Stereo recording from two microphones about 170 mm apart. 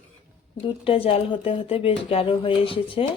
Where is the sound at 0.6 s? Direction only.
30° left (ahead or behind).